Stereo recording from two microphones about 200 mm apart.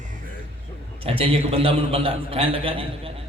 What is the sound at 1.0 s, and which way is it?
A man's voice, 30° right (ahead or behind).